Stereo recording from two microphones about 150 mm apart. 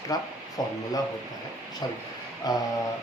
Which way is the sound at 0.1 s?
25° left (ahead or behind).